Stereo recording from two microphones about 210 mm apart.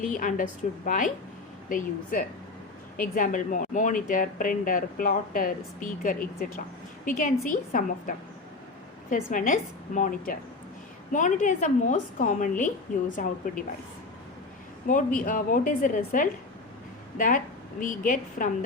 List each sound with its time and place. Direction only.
0.0 s speech: 40° left (ahead or behind)
9.3 s speech: 40° left (ahead or behind)
14.9 s speech: 40° left (ahead or behind)